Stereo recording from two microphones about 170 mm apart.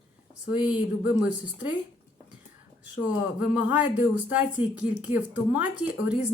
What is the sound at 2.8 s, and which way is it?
Speech, 10° right (ahead or behind).